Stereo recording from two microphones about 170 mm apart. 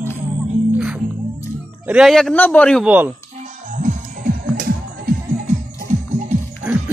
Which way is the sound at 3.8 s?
50° right (ahead or behind).